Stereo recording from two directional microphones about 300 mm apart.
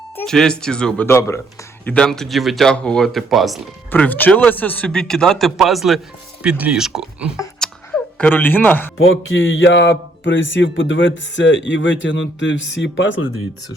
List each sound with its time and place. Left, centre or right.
0.2 s speech: centre
7.3 s a sound: centre
9.0 s speech: left